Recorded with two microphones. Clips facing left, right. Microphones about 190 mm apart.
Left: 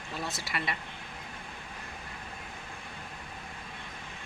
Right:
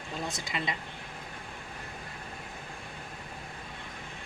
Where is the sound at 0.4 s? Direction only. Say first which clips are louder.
Right 1 dB; 20° right (ahead or behind).